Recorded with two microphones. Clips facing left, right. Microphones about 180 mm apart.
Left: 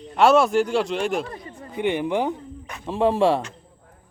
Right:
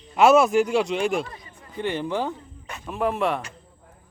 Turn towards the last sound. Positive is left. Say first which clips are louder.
# left 5 dB
turn(degrees=30)  # may be behind; listen again after turning